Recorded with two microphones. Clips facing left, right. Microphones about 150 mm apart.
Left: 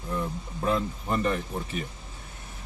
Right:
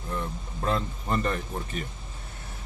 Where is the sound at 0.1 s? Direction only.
10° left (ahead or behind).